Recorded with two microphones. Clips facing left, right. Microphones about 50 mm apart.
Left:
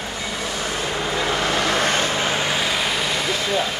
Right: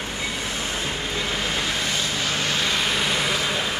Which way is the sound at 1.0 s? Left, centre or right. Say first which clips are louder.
Left 5 dB; left.